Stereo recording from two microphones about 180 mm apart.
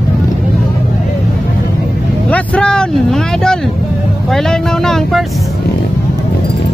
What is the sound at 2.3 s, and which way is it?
Vehicle, 5° left (ahead or behind).